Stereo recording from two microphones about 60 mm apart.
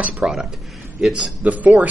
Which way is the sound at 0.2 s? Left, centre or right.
Centre.